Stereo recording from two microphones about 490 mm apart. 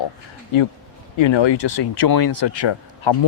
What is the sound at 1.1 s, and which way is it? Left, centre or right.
Speech, left.